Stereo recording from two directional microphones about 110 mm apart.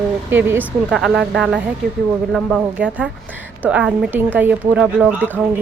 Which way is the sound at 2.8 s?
10° right (ahead or behind).